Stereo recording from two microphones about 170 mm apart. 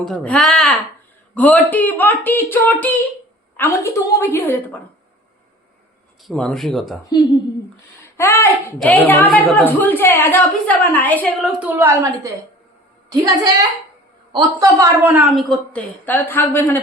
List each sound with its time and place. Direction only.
0.0 s a woman's voice: 5° left (ahead or behind)
6.2 s speech: 5° left (ahead or behind)
8.1 s a woman's voice: 15° left (ahead or behind)
11.4 s a woman's voice: 10° right (ahead or behind)
15.0 s a woman's voice: 5° right (ahead or behind); by 16.7 s 15° left (ahead or behind)